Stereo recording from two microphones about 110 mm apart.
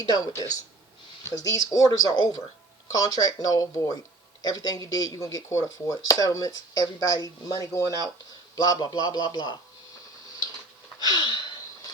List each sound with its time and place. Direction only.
0.0 s speech: 35° left (ahead or behind)
11.0 s gasp: 40° left (ahead or behind)